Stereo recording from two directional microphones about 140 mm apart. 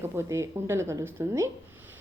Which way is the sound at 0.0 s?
20° right (ahead or behind).